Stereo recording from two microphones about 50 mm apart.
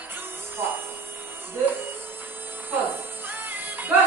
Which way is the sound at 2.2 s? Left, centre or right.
Right.